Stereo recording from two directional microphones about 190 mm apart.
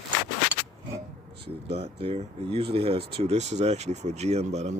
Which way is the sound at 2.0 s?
30° right (ahead or behind).